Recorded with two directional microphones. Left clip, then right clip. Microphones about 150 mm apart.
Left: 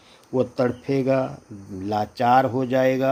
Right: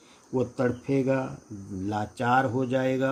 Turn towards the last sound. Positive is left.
turn(degrees=40)  # may be behind; listen again after turning